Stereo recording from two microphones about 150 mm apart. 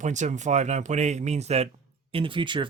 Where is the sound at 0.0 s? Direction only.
55° right (ahead or behind).